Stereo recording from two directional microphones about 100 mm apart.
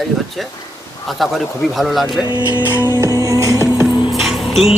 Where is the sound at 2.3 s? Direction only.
45° left (ahead or behind).